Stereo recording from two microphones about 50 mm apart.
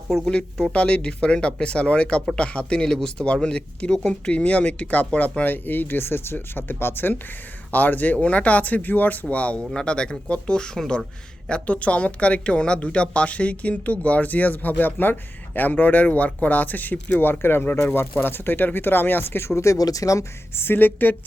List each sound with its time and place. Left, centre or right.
0.1 s speech: centre
0.7 s a man's voice: left
19.5 s speech: left
20.6 s speech: left